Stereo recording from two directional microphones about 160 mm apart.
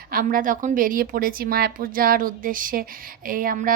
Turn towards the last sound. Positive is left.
turn(degrees=-60)  # may be behind; listen again after turning